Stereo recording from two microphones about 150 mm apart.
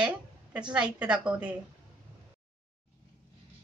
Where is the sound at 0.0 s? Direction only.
5° right (ahead or behind).